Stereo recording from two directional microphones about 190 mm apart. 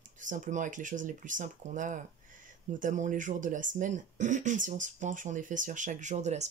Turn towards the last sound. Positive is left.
turn(degrees=-35)  # may be behind; listen again after turning